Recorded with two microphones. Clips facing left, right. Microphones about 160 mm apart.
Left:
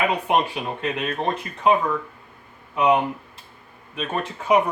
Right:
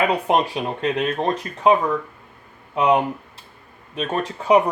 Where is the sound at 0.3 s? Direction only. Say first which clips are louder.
Right 2 dB; 35° right (ahead or behind).